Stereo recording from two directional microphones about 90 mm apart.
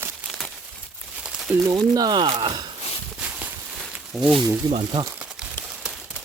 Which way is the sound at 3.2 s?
10° right (ahead or behind).